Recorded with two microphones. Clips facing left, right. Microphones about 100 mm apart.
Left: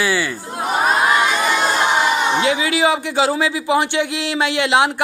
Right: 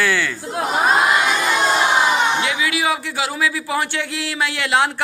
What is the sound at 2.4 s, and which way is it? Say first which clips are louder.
Speech: left 4 dB; 30° left (ahead or behind).